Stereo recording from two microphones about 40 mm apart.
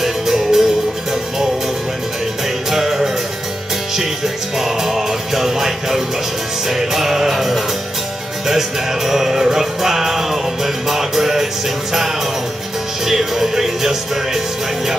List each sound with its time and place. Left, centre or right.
0.0 s music: centre
2.7 s music: centre
4.6 s music: centre
13.0 s music: centre